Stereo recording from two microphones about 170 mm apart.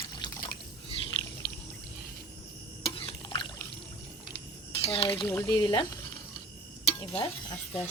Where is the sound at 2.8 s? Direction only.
30° left (ahead or behind).